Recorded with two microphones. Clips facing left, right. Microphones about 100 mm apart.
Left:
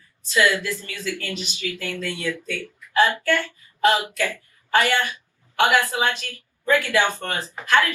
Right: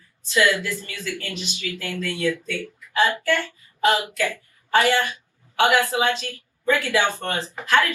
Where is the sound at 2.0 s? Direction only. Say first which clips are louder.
Right 3 dB; 20° left (ahead or behind).